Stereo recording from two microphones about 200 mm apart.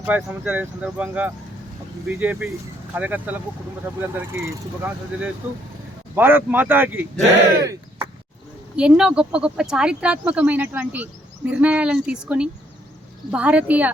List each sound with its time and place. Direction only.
0.0 s speech: 10° right (ahead or behind)
7.6 s a sound: 15° right (ahead or behind)
8.7 s speech: 5° right (ahead or behind)